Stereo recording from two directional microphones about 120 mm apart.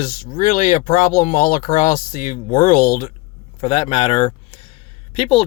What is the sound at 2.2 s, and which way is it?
Speech, 90° left.